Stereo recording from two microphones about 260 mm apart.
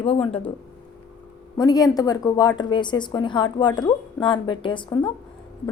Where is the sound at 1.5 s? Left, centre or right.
Centre.